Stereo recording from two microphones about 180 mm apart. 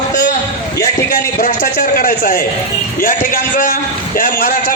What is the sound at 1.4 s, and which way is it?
A man's voice, 55° left (ahead or behind).